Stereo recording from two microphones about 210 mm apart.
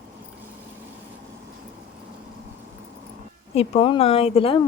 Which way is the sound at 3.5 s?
30° left (ahead or behind).